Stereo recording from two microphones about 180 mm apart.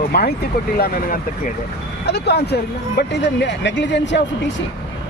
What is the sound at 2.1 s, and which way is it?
Speech, 65° left (ahead or behind).